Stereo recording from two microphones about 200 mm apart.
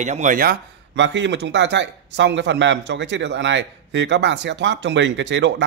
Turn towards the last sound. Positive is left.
turn(degrees=-65)  # may be behind; listen again after turning